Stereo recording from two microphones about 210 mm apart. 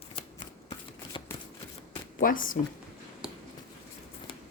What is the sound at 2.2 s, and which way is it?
Speech, 40° left (ahead or behind).